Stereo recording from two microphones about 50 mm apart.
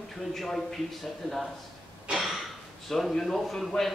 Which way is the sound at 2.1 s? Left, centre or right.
Centre.